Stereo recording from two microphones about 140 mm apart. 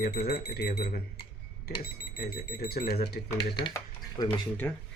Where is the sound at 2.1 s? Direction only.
90° left.